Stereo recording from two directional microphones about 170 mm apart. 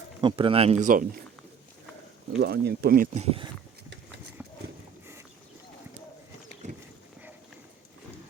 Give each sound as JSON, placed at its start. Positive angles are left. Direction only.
{"t": 0.2, "sound": "speech", "side_deg": -30}
{"t": 2.4, "sound": "speech", "side_deg": -70}
{"t": 3.2, "sound": "speech", "side_deg": -35}
{"t": 4.4, "sound": "clip-clop", "side_deg": -5}
{"t": 6.6, "sound": "a sound", "side_deg": -45}